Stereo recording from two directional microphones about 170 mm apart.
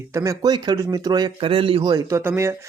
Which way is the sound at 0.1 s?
20° right (ahead or behind).